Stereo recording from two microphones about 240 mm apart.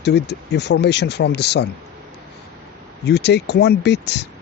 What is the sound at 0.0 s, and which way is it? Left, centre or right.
Speech, left.